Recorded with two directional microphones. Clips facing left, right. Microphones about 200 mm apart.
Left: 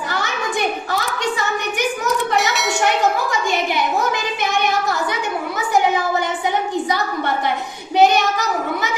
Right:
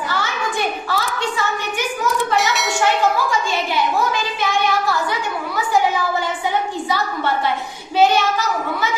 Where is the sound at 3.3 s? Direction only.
15° left (ahead or behind).